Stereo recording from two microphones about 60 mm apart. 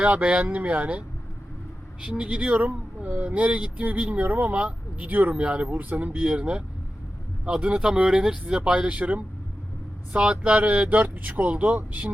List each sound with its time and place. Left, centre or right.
0.0 s speech: right
5.7 s speech: right